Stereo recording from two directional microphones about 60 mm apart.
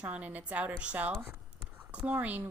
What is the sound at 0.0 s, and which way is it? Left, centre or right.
Speech, right.